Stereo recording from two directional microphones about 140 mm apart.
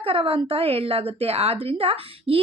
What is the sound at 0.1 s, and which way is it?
Speech, 40° right (ahead or behind).